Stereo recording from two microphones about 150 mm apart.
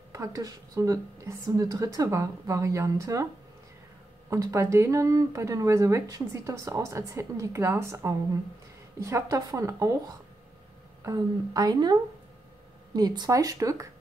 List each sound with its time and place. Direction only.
0.1 s speech: 25° right (ahead or behind)
4.3 s speech: 20° right (ahead or behind)
11.1 s speech: 25° right (ahead or behind)